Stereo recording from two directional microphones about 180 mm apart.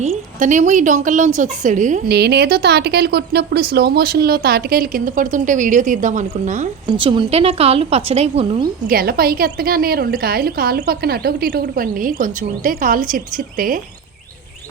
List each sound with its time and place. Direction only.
0.3 s a woman's voice: 45° right (ahead or behind)
2.0 s a woman's voice: 65° right (ahead or behind); by 6.7 s 45° right (ahead or behind)
6.9 s a woman's voice: 30° right (ahead or behind)
8.9 s a woman's voice: 55° right (ahead or behind)